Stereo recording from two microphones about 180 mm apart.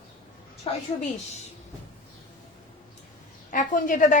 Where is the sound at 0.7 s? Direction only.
30° left (ahead or behind).